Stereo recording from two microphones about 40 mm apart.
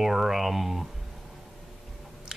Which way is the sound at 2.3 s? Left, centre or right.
Centre.